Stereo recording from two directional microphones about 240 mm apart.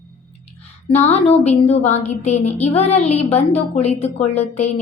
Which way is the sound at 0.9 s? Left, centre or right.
Left.